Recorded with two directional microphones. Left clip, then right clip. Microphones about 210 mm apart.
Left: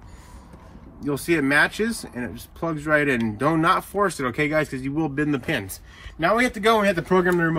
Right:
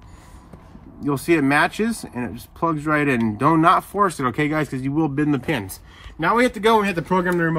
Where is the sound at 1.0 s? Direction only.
25° right (ahead or behind).